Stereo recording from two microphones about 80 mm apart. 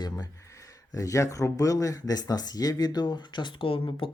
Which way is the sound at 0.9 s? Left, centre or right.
Left.